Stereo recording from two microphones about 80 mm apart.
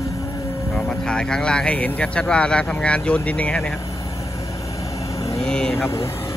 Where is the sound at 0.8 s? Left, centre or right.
Centre.